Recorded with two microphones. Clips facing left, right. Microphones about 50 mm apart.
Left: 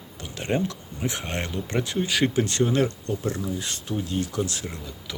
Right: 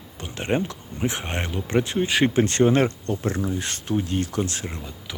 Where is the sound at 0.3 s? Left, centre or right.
Right.